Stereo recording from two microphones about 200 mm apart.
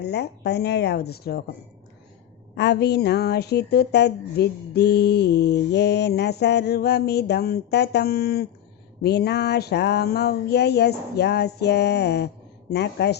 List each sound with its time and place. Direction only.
0.0 s a woman's voice: 55° left (ahead or behind)
2.6 s a woman's voice: 55° left (ahead or behind)